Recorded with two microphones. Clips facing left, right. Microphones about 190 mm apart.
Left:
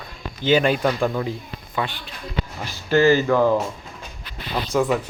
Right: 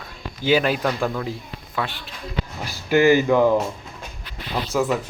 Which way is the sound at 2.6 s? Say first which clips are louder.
Even; 10° right (ahead or behind).